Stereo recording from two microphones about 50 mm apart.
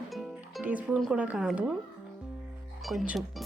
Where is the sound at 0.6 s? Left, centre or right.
Right.